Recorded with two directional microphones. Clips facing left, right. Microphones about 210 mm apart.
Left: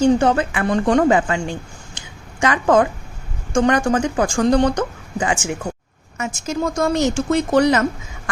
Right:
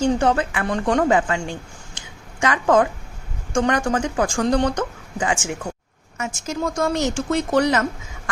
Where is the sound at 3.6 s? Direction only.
15° left (ahead or behind).